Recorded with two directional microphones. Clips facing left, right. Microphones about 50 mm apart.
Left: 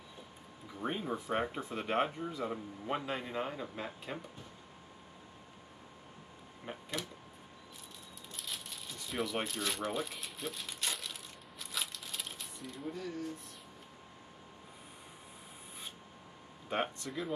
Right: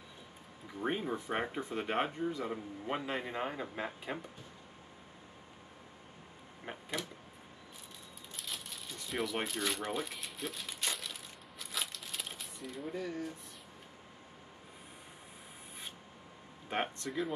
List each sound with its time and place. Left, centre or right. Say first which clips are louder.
0.8 s speech: right 1 dB; centre
3.2 s a man's voice: right 1 dB; centre
6.6 s mechanisms: right 1 dB; centre
8.4 s crumpling: even; centre
16.6 s speech: even; centre